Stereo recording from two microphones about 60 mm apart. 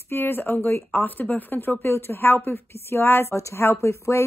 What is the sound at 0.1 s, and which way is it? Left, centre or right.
A woman's voice, left.